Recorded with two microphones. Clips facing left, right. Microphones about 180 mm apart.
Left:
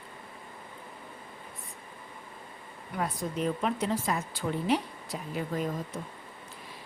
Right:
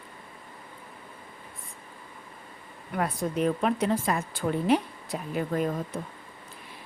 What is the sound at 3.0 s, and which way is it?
A woman's voice, 60° right (ahead or behind).